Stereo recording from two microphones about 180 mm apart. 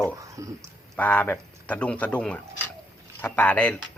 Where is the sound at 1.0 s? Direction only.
10° left (ahead or behind).